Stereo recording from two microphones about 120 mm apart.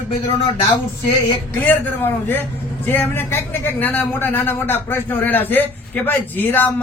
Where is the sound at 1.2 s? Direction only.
15° left (ahead or behind).